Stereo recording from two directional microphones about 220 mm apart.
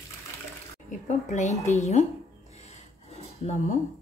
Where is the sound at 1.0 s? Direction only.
30° left (ahead or behind).